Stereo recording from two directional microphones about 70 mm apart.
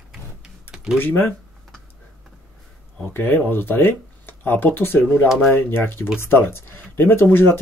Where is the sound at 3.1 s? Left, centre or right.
Left.